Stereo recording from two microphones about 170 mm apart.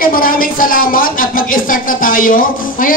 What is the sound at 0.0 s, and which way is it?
Speech, 55° left (ahead or behind).